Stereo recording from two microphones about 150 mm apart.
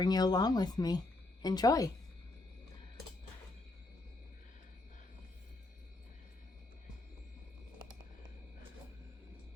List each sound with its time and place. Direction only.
0.0 s speech: 25° left (ahead or behind)